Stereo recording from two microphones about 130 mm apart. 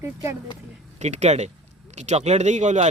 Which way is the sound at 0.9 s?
60° right (ahead or behind).